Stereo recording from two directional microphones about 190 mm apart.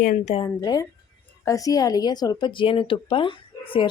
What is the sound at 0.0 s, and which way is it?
Speech, 45° left (ahead or behind).